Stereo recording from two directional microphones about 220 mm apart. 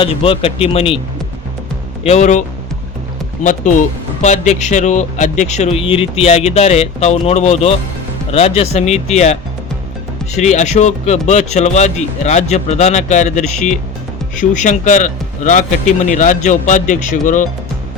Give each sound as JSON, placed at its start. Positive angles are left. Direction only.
{"t": 0.0, "sound": "speech", "side_deg": 25}
{"t": 2.0, "sound": "a man's voice", "side_deg": 30}
{"t": 3.4, "sound": "a man's voice", "side_deg": 35}